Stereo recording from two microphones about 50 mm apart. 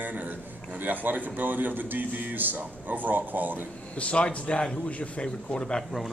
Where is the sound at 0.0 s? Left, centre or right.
Right.